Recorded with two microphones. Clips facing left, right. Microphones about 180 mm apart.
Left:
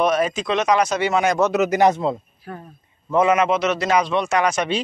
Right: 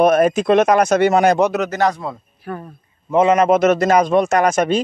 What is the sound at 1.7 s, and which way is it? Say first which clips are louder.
Speech: left 2 dB; 20° left (ahead or behind).